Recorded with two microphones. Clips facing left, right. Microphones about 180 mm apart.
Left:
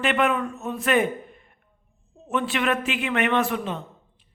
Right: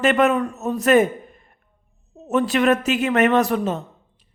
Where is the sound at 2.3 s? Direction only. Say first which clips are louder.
Right 6 dB; 40° right (ahead or behind).